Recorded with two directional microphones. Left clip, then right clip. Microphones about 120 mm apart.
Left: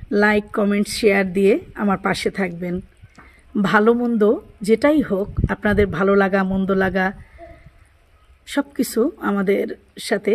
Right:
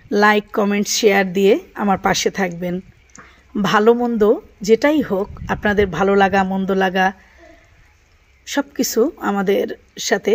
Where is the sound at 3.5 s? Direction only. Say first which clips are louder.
Right 2 dB; 20° left (ahead or behind).